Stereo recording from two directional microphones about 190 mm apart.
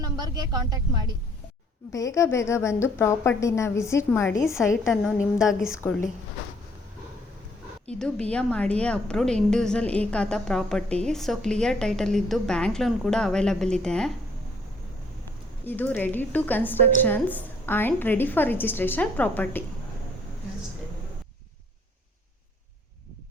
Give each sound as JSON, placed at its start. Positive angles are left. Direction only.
{"t": 0.0, "sound": "a woman's voice", "side_deg": -20}
{"t": 1.9, "sound": "a woman's voice", "side_deg": 15}
{"t": 4.9, "sound": "a woman's voice", "side_deg": 0}
{"t": 7.9, "sound": "a woman's voice", "side_deg": 5}
{"t": 15.6, "sound": "a woman's voice", "side_deg": 10}